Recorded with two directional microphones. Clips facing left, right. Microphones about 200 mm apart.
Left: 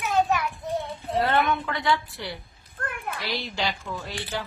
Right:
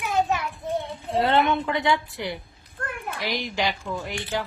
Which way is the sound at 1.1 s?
25° right (ahead or behind).